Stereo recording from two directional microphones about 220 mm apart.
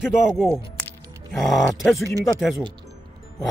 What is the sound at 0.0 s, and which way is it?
Speech, centre (ahead or behind).